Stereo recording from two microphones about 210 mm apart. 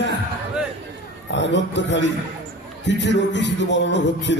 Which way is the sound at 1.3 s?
55° left (ahead or behind).